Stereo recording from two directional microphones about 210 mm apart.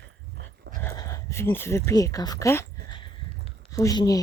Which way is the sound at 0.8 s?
15° left (ahead or behind).